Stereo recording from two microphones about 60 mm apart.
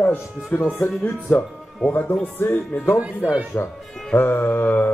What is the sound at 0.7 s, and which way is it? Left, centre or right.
Mantra, left.